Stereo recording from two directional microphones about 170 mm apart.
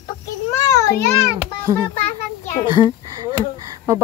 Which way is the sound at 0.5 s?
15° left (ahead or behind).